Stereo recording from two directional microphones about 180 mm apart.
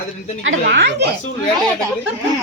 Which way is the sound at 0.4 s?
75° right (ahead or behind).